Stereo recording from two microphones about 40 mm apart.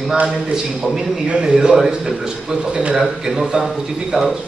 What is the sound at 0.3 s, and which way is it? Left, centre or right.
Speech, centre.